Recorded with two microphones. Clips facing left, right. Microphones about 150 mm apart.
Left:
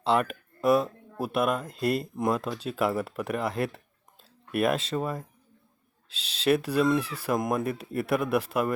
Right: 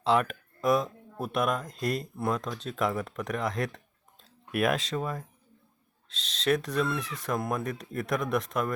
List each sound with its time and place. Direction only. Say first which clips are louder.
0.0 s speech: even; centre (ahead or behind)
7.0 s speech: left 2 dB; 30° left (ahead or behind)
7.3 s speech: left 3 dB; 15° left (ahead or behind)